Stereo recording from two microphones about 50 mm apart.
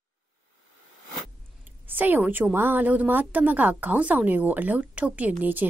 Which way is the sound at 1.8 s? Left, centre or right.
Right.